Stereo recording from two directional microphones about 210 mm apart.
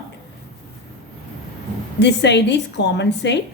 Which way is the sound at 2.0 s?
55° left (ahead or behind).